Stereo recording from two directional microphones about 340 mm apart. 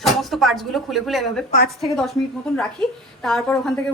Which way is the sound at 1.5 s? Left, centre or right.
Left.